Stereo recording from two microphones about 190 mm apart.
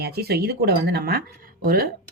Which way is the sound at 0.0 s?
55° right (ahead or behind).